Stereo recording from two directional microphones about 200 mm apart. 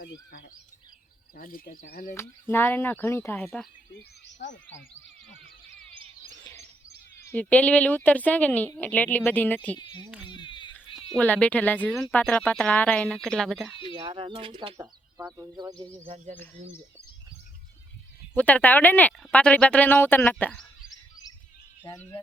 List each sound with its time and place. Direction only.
1.4 s speech: 45° left (ahead or behind)
2.1 s speech: 10° left (ahead or behind)
4.3 s speech: 60° left (ahead or behind)
7.3 s speech: 5° left (ahead or behind)
9.7 s speech: 20° left (ahead or behind)
10.2 s a sound: 25° left (ahead or behind)
11.2 s speech: 5° left (ahead or behind)
13.9 s speech: 25° right (ahead or behind)
15.8 s speech: 30° right (ahead or behind)
18.3 s speech: 10° left (ahead or behind)
21.8 s speech: 10° left (ahead or behind)